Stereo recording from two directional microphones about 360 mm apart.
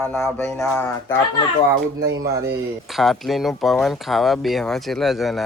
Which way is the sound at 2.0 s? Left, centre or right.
Right.